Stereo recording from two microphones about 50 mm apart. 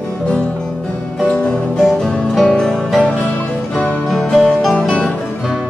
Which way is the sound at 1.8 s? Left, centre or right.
Centre.